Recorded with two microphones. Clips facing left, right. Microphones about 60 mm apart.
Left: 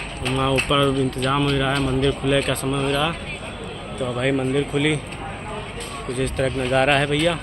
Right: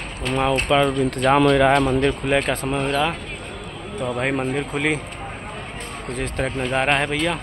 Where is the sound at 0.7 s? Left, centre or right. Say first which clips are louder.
Right 3 dB; right.